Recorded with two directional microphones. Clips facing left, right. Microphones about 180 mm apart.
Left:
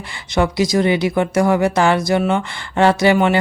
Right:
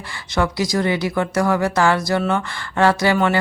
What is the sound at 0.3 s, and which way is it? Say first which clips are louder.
Speech: left 4 dB; 20° left (ahead or behind).